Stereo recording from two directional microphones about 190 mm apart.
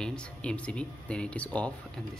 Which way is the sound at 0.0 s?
5° left (ahead or behind).